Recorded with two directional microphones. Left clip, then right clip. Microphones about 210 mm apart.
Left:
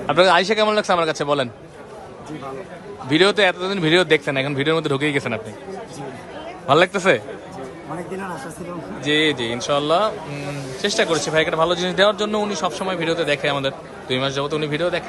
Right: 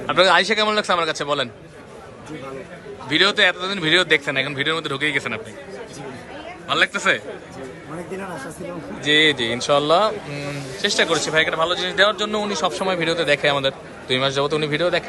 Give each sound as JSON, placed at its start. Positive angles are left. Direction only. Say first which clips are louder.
{"t": 0.1, "sound": "speech", "louder": "even", "side_deg": 20}
{"t": 3.1, "sound": "speech", "louder": "left 1 dB", "side_deg": 25}
{"t": 6.7, "sound": "speech", "louder": "left 4 dB", "side_deg": 30}
{"t": 9.0, "sound": "speech", "louder": "right 2 dB", "side_deg": 15}